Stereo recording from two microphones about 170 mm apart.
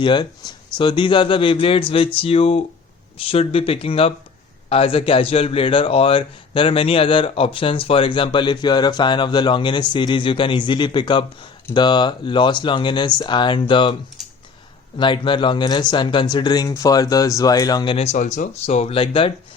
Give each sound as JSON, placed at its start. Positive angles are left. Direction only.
{"t": 0.0, "sound": "a man's voice", "side_deg": 25}
{"t": 14.2, "sound": "a sound", "side_deg": 0}
{"t": 14.9, "sound": "speech", "side_deg": 30}